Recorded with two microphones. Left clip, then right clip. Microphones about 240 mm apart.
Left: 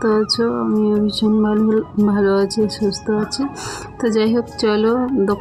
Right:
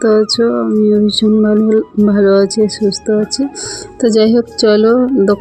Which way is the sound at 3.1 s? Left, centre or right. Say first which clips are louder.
Right 6 dB; centre.